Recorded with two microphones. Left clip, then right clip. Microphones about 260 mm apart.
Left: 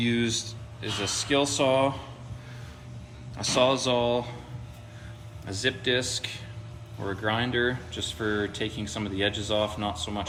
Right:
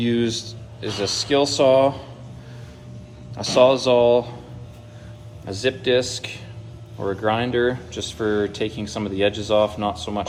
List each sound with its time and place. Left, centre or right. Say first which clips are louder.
0.0 s speech: right 5 dB; centre
3.3 s speech: right 8 dB; centre
5.5 s speech: right 6 dB; centre